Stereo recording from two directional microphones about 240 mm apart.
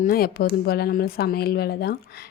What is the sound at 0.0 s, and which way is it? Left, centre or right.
Speech, left.